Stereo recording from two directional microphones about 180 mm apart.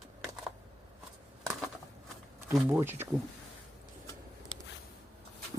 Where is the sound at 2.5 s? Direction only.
15° right (ahead or behind).